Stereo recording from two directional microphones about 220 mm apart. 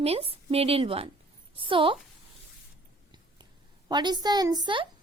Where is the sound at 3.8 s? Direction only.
20° right (ahead or behind).